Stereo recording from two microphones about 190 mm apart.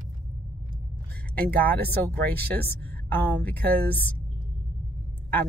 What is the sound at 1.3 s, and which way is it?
Speech, 10° left (ahead or behind).